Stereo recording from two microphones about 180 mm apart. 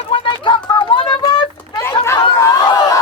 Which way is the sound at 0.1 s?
30° left (ahead or behind).